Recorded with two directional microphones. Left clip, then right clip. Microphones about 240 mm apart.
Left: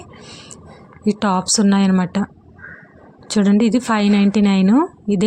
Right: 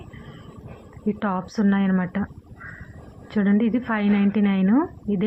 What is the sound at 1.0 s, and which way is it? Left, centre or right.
A woman's voice, left.